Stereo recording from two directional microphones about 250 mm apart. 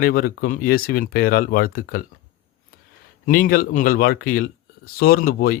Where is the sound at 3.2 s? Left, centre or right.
Left.